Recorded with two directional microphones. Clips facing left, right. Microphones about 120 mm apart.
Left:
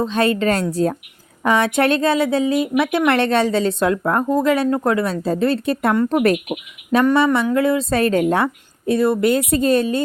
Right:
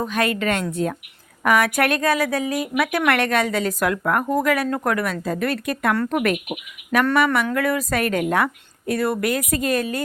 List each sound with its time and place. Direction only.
0.0 s a woman's voice: 30° left (ahead or behind)
7.0 s a woman's voice: 20° left (ahead or behind)